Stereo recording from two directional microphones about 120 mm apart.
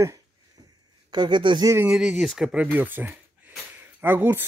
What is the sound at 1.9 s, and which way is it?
Speech, 5° right (ahead or behind).